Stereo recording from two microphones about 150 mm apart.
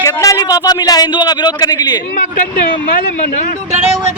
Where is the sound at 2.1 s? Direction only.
75° left (ahead or behind).